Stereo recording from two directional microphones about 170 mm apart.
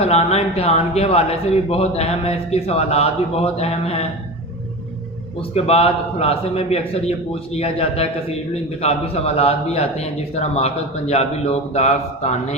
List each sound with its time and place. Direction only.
0.0 s speech: 40° left (ahead or behind)
5.4 s speech: 35° left (ahead or behind)